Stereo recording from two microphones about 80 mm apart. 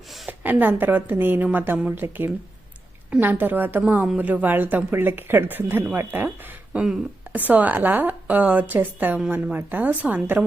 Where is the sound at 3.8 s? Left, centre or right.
Centre.